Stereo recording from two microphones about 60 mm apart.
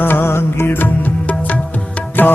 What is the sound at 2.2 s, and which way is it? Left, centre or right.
Music, left.